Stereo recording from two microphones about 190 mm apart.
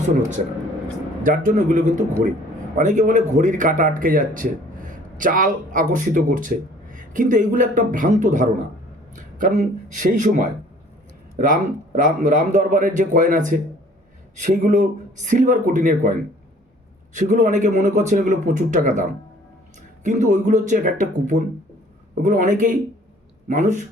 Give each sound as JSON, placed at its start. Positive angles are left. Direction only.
{"t": 1.2, "sound": "a man's voice", "side_deg": -45}
{"t": 17.2, "sound": "a man's voice", "side_deg": -40}
{"t": 20.1, "sound": "a man's voice", "side_deg": -40}